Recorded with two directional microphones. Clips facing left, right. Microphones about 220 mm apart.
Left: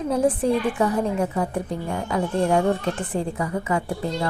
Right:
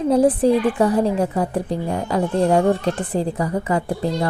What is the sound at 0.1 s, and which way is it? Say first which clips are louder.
A woman's voice: right 5 dB; 35° right (ahead or behind).